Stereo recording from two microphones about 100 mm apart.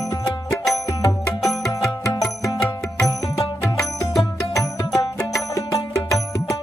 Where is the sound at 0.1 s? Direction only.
40° left (ahead or behind).